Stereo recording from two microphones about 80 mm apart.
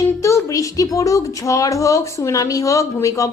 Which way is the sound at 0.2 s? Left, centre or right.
Left.